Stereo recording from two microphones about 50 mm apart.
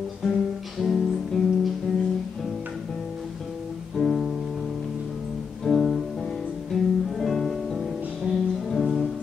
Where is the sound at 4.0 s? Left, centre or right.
Centre.